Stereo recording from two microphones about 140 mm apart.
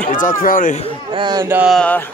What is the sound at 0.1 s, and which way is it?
Speech, 75° left (ahead or behind).